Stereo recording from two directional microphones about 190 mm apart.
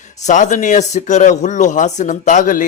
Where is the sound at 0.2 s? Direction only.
40° left (ahead or behind).